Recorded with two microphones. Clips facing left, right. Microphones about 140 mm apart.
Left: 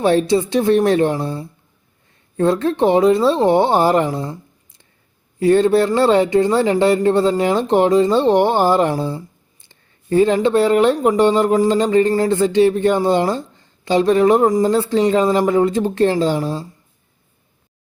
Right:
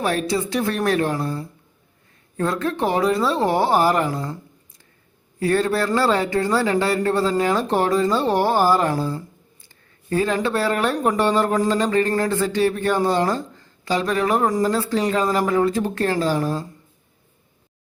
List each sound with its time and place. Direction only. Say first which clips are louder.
0.0 s speech: left 7 dB; 25° left (ahead or behind)
5.4 s speech: left 7 dB; 25° left (ahead or behind)